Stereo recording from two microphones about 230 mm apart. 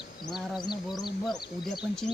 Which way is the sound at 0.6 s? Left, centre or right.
Centre.